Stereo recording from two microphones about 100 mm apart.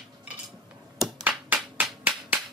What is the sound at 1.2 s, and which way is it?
Clapping, 15° right (ahead or behind).